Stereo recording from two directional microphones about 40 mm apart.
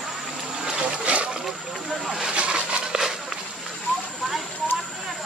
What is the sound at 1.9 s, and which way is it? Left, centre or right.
Vehicle, centre.